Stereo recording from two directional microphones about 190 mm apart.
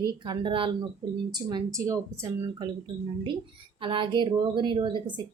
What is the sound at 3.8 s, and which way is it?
A woman's voice, 25° right (ahead or behind).